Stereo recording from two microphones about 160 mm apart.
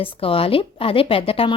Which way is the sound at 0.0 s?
35° left (ahead or behind).